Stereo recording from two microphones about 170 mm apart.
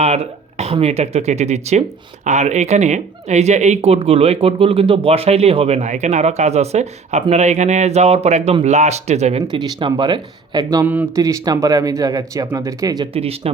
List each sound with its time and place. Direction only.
0.0 s speech: 40° right (ahead or behind)
9.4 s speech: 25° right (ahead or behind)
13.1 s speech: 35° right (ahead or behind)